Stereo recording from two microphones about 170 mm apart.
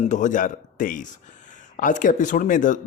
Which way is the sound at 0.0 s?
45° left (ahead or behind).